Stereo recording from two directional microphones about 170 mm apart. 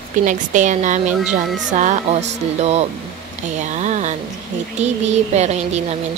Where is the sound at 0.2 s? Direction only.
50° right (ahead or behind).